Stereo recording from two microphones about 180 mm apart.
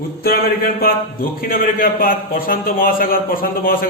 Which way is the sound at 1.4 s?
55° left (ahead or behind).